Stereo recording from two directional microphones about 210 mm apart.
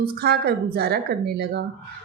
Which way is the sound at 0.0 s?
50° right (ahead or behind).